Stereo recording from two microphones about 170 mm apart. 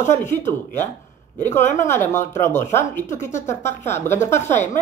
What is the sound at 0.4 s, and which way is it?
A woman's voice, 15° left (ahead or behind).